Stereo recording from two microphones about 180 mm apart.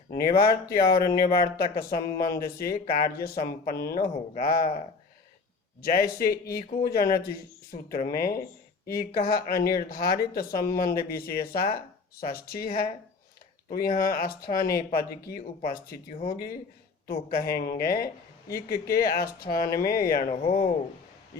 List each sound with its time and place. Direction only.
0.1 s speech: 55° left (ahead or behind)
5.8 s speech: 55° left (ahead or behind)
20.3 s speech: 30° left (ahead or behind)